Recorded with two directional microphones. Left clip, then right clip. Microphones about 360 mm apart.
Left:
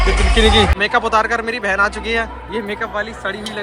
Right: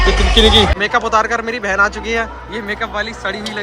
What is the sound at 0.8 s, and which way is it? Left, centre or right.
A man's voice, centre.